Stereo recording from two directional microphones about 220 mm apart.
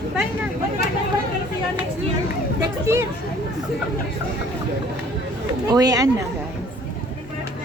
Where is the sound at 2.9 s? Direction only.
10° right (ahead or behind).